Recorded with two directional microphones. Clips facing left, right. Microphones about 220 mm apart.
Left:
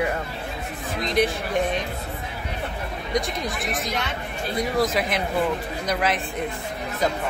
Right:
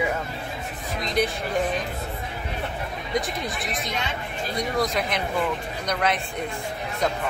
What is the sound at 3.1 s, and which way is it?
Speech, centre (ahead or behind).